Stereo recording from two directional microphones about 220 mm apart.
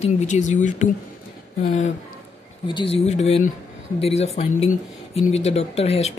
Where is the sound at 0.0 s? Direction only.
30° left (ahead or behind).